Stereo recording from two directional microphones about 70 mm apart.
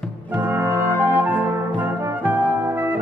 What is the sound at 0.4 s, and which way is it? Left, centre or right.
Brass instrument, right.